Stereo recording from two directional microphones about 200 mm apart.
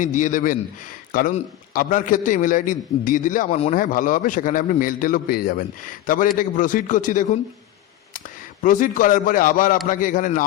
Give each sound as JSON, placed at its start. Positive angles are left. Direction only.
{"t": 0.0, "sound": "a man's voice", "side_deg": 40}
{"t": 8.6, "sound": "a man's voice", "side_deg": 40}